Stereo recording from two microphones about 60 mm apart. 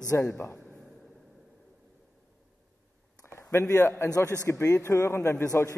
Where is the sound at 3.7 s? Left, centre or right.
Left.